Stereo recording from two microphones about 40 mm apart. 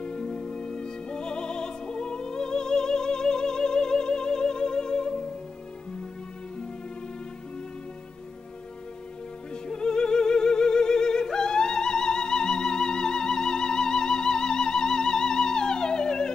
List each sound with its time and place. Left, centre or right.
0.0 s music: centre
9.5 s music: centre